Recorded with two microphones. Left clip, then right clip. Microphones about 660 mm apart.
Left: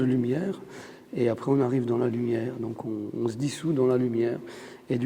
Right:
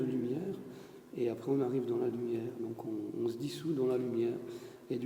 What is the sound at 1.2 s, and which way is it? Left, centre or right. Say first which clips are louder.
Speech: left 9 dB; left.